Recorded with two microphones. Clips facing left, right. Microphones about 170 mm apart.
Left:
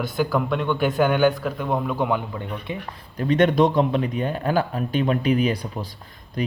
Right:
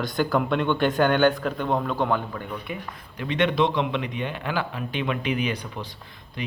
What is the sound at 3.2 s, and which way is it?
A man's voice, 40° left (ahead or behind).